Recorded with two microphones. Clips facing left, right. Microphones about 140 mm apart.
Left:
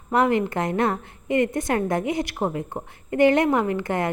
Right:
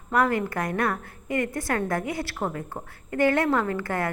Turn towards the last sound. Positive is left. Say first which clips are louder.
# left 3 dB
turn(degrees=20)  # may be behind; listen again after turning